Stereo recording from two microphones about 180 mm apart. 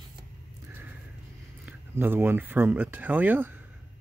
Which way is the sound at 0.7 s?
10° right (ahead or behind).